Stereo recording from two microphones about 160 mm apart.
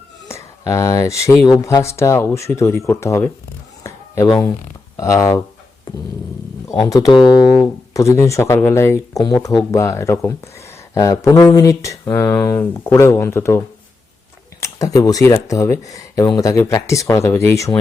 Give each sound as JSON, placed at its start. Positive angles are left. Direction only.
{"t": 0.3, "sound": "speech", "side_deg": 20}
{"t": 3.8, "sound": "a sound", "side_deg": 20}
{"t": 4.9, "sound": "speech", "side_deg": 20}
{"t": 6.7, "sound": "speech", "side_deg": 20}
{"t": 14.6, "sound": "speech", "side_deg": 20}